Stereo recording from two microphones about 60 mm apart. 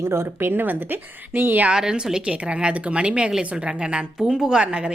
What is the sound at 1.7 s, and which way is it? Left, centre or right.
A woman's voice, centre.